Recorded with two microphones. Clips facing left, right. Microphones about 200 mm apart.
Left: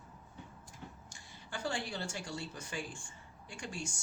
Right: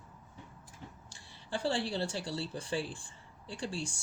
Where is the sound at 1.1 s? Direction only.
30° right (ahead or behind).